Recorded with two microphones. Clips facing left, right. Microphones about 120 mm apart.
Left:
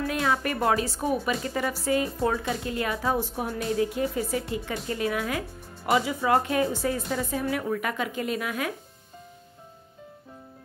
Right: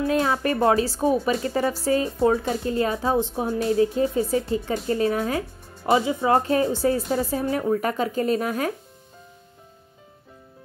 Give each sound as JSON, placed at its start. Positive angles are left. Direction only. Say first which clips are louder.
{"t": 0.0, "sound": "speech", "louder": "right 4 dB", "side_deg": -30}